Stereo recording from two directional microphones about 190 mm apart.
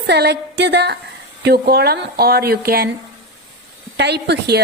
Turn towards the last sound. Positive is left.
turn(degrees=-60)  # may be behind; listen again after turning